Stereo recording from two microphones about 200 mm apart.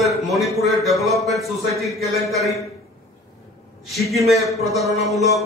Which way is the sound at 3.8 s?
Centre (ahead or behind).